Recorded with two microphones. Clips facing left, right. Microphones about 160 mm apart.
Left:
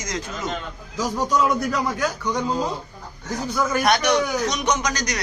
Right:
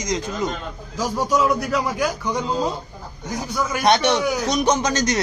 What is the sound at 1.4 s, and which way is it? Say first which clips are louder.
Speech: right 1 dB; centre (ahead or behind).